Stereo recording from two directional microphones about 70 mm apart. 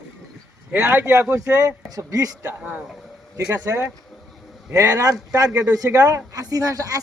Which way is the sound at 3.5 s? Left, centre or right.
Right.